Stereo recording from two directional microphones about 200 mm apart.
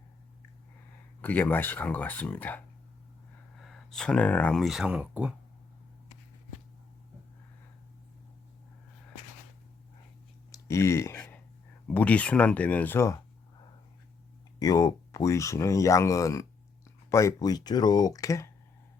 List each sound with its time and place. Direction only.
1.2 s speech: 10° left (ahead or behind)
3.6 s speech: centre (ahead or behind)
10.5 s a sound: 15° left (ahead or behind)
11.9 s speech: 5° left (ahead or behind)
14.6 s speech: 15° left (ahead or behind)